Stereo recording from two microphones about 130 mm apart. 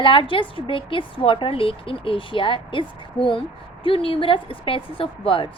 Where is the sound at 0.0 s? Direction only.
40° left (ahead or behind).